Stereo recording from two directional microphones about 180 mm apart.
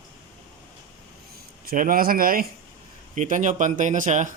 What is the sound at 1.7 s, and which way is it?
Speech, 50° right (ahead or behind).